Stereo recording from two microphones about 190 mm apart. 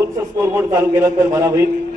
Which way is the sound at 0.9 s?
15° right (ahead or behind).